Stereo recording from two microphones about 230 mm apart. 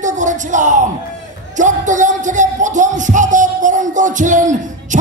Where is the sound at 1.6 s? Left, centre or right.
Right.